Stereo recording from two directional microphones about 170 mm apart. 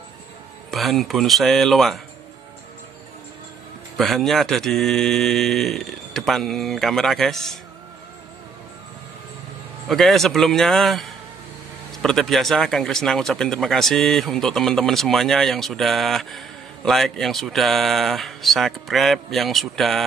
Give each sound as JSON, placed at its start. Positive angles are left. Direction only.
{"t": 0.7, "sound": "speech", "side_deg": 0}
{"t": 3.9, "sound": "speech", "side_deg": 0}
{"t": 9.8, "sound": "speech", "side_deg": 0}